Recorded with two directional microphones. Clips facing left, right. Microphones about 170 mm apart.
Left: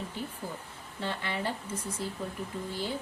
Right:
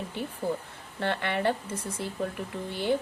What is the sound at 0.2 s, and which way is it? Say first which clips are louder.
Speech: right 7 dB; 65° right (ahead or behind).